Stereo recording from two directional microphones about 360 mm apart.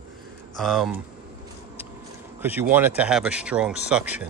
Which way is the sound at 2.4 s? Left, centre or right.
Centre.